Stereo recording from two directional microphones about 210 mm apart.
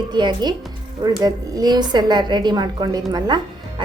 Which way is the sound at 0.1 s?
20° right (ahead or behind).